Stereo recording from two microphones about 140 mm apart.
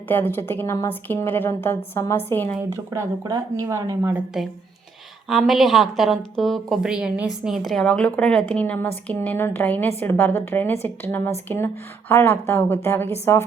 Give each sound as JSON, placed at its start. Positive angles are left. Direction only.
{"t": 0.1, "sound": "a woman's voice", "side_deg": 15}
{"t": 2.9, "sound": "speech", "side_deg": -25}
{"t": 5.3, "sound": "a woman's voice", "side_deg": 0}